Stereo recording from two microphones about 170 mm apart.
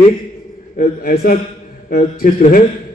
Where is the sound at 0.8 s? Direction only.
60° left (ahead or behind).